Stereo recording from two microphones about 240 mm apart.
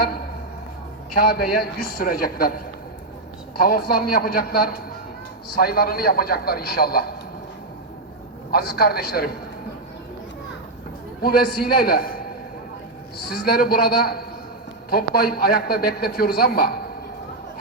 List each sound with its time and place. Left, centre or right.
1.1 s a man's voice: left
3.6 s a man's voice: left
8.5 s a man's voice: left
11.2 s a man's voice: left
13.3 s a man's voice: left